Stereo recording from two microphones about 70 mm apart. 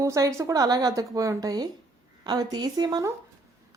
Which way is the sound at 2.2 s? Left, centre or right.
Right.